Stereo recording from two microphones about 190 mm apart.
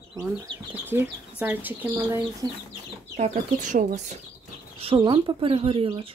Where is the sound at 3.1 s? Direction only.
40° right (ahead or behind).